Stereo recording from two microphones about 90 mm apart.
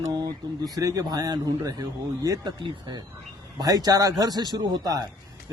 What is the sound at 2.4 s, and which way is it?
Speech, 60° right (ahead or behind).